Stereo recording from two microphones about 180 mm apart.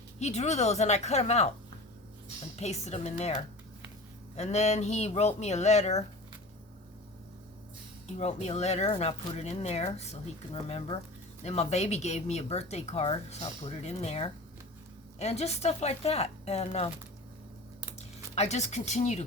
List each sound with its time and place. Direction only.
0.2 s speech: 40° left (ahead or behind)
2.6 s speech: 35° left (ahead or behind)
4.4 s speech: 40° left (ahead or behind)
8.0 s speech: 40° left (ahead or behind)
17.9 s speech: 35° left (ahead or behind)